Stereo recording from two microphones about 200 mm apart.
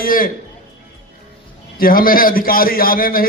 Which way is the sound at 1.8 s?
45° left (ahead or behind).